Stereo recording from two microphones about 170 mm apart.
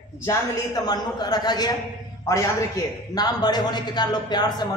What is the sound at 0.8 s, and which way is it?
Speech, 25° left (ahead or behind).